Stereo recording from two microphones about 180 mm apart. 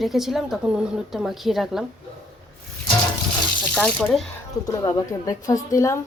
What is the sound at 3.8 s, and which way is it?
Speech, 5° left (ahead or behind).